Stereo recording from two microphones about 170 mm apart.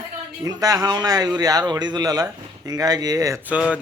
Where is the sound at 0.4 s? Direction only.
20° right (ahead or behind).